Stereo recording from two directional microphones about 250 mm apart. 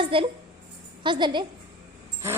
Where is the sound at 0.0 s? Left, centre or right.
Right.